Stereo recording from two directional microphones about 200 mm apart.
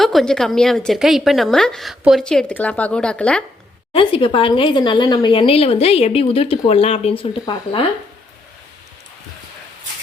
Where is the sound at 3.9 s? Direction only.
25° left (ahead or behind).